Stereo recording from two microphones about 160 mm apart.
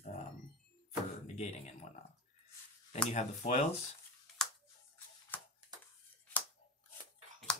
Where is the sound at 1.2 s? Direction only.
45° left (ahead or behind).